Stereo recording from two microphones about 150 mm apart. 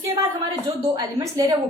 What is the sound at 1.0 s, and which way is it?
Speech, 25° right (ahead or behind).